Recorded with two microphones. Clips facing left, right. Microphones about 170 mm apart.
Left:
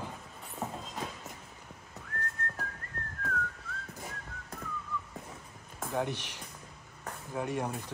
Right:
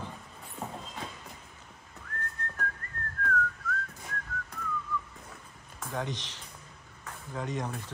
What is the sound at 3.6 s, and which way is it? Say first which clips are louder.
Whistling: right 9 dB; 30° left (ahead or behind).